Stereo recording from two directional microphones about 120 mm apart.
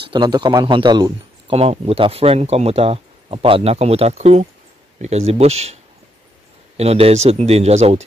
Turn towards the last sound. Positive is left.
turn(degrees=-65)  # may be behind; listen again after turning